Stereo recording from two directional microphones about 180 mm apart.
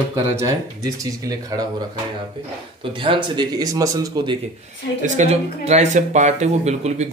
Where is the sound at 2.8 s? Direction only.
30° right (ahead or behind).